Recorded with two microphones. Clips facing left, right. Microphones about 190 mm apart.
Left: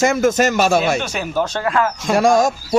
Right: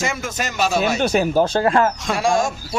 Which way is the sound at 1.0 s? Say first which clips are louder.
Right 5 dB; 35° right (ahead or behind).